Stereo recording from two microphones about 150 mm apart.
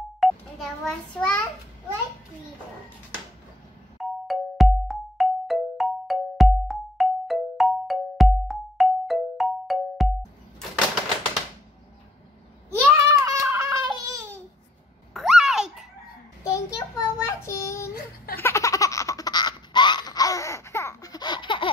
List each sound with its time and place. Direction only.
0.2 s a child's voice: centre (ahead or behind)
4.0 s music: centre (ahead or behind)
12.8 s babbling: 20° right (ahead or behind)
15.1 s a sound: centre (ahead or behind)
16.4 s child singing: 20° left (ahead or behind)
17.9 s a sound: 90° left
18.4 s baby laughter: 20° left (ahead or behind)